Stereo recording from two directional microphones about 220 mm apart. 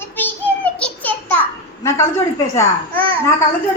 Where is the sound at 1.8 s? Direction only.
15° left (ahead or behind).